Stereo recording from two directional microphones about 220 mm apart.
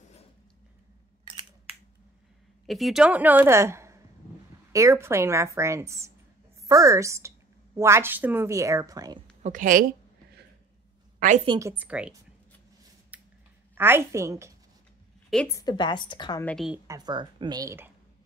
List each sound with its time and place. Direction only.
2.6 s a woman's voice: centre (ahead or behind); by 9.2 s 15° right (ahead or behind)
9.4 s a woman's voice: 35° right (ahead or behind)
11.1 s a woman's voice: 35° right (ahead or behind)
11.4 s a woman's voice: 20° right (ahead or behind)
11.7 s a woman's voice: 5° right (ahead or behind)
13.1 s a sound: 5° right (ahead or behind)
13.7 s a woman's voice: 10° right (ahead or behind)
15.2 s a woman's voice: 5° left (ahead or behind)
15.5 s a woman's voice: 20° left (ahead or behind)
16.4 s a woman's voice: centre (ahead or behind)
16.8 s a woman's voice: 15° right (ahead or behind)